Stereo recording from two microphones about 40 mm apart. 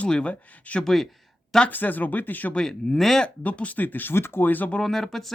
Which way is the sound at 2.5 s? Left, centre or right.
Centre.